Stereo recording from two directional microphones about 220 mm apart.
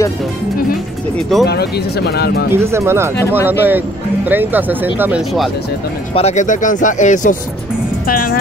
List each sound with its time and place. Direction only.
1.4 s speech: 50° left (ahead or behind)
2.5 s speech: 10° right (ahead or behind)
3.2 s speech: 10° left (ahead or behind)
3.4 s speech: 10° right (ahead or behind)
6.1 s speech: 30° left (ahead or behind)